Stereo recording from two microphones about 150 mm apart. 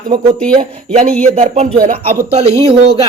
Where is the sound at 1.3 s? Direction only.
50° right (ahead or behind).